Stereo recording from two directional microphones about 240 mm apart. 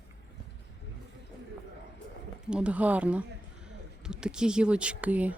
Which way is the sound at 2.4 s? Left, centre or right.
Centre.